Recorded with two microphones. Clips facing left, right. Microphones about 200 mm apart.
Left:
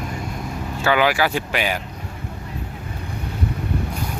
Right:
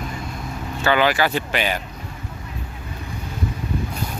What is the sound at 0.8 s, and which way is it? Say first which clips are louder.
Speech: even; 10° left (ahead or behind).